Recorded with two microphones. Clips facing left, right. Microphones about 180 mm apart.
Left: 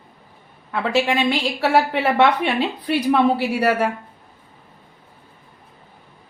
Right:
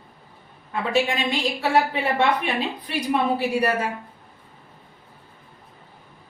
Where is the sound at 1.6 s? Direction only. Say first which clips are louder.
Left 3 dB; 75° left (ahead or behind).